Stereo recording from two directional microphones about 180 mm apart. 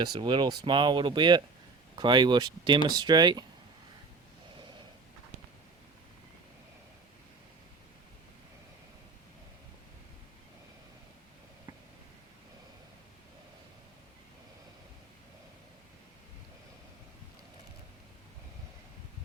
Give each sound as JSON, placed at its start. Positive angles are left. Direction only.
{"t": 0.0, "sound": "speech", "side_deg": -25}